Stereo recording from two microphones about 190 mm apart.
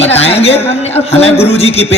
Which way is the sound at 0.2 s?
30° left (ahead or behind).